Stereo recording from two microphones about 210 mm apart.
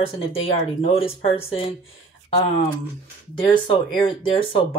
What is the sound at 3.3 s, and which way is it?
Speech, 20° left (ahead or behind).